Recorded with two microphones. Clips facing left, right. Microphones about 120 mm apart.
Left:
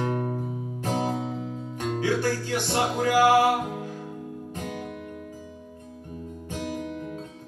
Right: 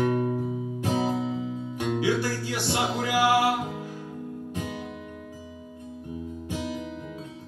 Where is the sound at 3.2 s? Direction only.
Centre (ahead or behind).